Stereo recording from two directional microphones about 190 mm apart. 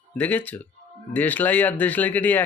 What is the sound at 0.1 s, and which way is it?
Speech, 10° left (ahead or behind).